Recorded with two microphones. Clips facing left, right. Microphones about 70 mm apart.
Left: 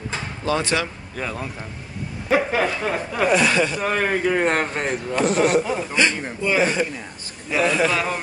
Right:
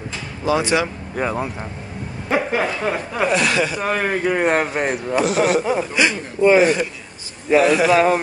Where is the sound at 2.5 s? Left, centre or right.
Centre.